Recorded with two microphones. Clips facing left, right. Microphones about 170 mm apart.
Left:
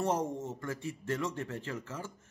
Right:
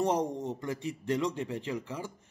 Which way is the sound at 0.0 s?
15° right (ahead or behind).